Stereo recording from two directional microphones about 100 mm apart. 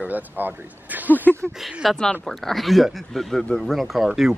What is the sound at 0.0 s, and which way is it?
Speech, 15° right (ahead or behind).